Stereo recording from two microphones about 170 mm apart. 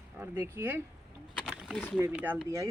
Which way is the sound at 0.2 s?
15° right (ahead or behind).